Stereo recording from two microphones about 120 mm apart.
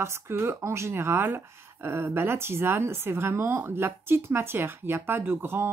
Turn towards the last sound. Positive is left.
turn(degrees=-20)  # may be behind; listen again after turning